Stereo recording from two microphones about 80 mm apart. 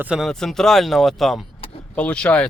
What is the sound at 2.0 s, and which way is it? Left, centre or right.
Speech, centre.